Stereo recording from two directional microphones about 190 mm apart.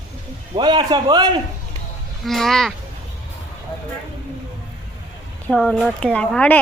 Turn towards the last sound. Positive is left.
turn(degrees=5)  # may be behind; listen again after turning